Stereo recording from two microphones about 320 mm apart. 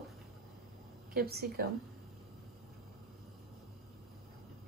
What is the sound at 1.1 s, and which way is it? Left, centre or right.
Speech, right.